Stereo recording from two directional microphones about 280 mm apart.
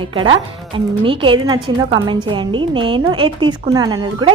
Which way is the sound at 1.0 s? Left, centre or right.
Centre.